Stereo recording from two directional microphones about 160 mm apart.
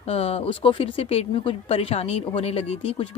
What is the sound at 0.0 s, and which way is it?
Speech, 40° left (ahead or behind).